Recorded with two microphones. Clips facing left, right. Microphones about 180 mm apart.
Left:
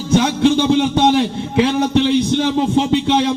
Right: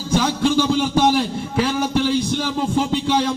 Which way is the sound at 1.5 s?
20° left (ahead or behind).